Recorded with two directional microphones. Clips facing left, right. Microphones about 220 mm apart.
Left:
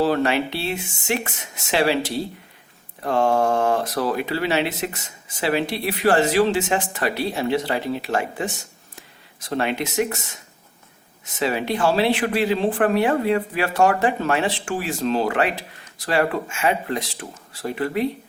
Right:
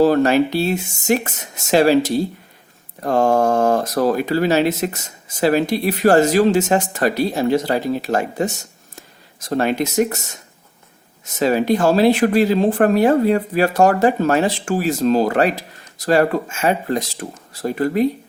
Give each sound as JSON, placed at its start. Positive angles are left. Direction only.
{"t": 0.0, "sound": "speech", "side_deg": -45}
{"t": 11.3, "sound": "speech", "side_deg": -40}